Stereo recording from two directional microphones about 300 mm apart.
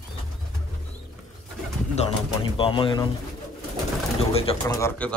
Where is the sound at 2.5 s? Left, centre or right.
Centre.